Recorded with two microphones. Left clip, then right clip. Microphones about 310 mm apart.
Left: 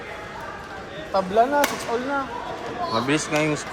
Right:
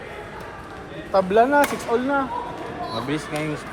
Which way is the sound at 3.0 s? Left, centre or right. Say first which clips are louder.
Left 5 dB; left.